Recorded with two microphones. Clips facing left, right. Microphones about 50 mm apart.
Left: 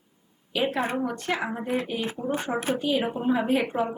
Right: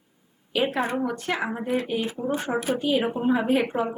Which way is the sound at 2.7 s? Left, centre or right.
Centre.